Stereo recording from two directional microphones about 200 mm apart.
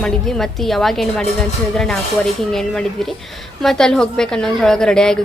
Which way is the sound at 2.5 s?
Centre (ahead or behind).